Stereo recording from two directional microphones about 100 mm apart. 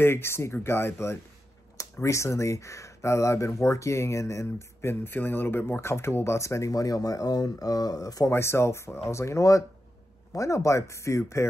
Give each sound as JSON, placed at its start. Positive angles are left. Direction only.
{"t": 0.0, "sound": "speech", "side_deg": 25}